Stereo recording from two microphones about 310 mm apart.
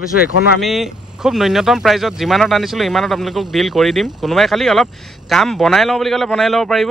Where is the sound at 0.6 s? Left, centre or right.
Centre.